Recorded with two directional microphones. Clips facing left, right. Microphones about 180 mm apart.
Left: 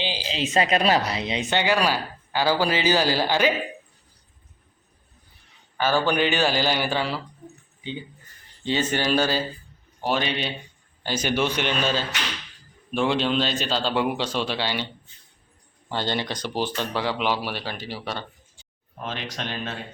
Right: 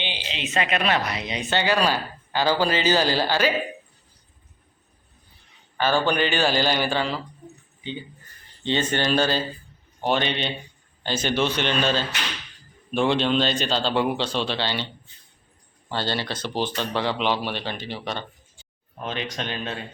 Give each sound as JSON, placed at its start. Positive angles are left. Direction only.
{"t": 0.0, "sound": "speech", "side_deg": 35}
{"t": 5.7, "sound": "speech", "side_deg": 10}
{"t": 8.6, "sound": "a man's voice", "side_deg": 5}
{"t": 15.9, "sound": "a man's voice", "side_deg": 15}